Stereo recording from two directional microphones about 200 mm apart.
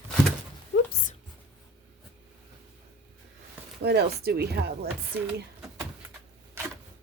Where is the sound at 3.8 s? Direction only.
55° right (ahead or behind).